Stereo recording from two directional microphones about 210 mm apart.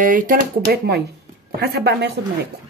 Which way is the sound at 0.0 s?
40° right (ahead or behind).